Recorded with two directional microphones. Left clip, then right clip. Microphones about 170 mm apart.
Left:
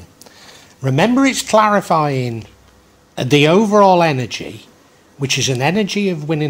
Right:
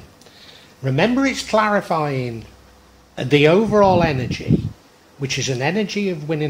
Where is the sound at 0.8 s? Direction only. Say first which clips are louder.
Left 4 dB; 45° left (ahead or behind).